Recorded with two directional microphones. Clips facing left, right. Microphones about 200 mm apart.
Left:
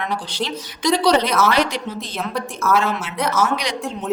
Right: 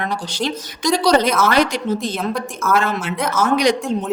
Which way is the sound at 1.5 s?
45° right (ahead or behind).